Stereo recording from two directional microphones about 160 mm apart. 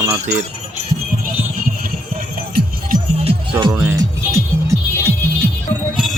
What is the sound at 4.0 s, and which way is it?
Music, 20° right (ahead or behind).